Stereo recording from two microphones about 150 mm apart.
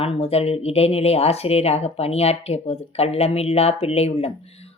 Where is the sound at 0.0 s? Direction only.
40° left (ahead or behind).